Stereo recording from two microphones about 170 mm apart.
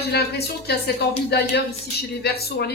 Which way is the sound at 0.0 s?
70° left (ahead or behind).